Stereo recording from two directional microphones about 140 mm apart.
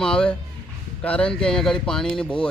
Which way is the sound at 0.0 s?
5° left (ahead or behind).